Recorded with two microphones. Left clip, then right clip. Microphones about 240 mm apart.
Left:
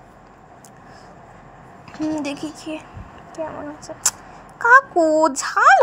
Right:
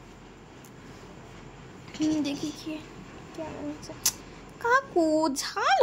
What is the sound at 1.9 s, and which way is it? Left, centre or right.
Speech, centre.